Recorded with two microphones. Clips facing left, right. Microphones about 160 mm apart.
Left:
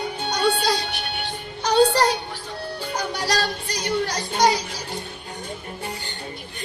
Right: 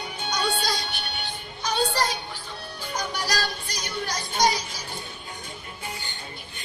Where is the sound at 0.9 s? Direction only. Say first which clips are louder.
Left 4 dB; 75° left (ahead or behind).